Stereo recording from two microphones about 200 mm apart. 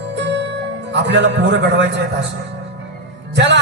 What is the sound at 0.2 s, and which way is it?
Music, 60° right (ahead or behind).